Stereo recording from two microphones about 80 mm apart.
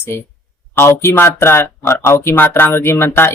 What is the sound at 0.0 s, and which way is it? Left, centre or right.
Speech, left.